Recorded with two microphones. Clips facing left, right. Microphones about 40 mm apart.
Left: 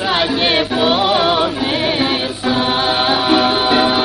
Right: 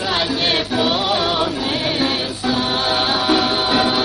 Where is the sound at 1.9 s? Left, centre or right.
Left.